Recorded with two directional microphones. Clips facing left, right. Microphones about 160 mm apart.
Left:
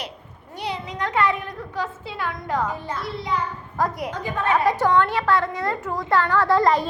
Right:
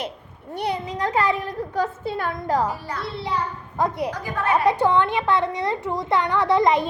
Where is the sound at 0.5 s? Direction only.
55° right (ahead or behind).